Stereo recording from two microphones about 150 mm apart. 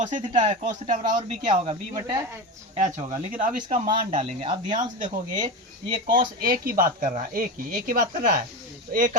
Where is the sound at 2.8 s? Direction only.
60° right (ahead or behind).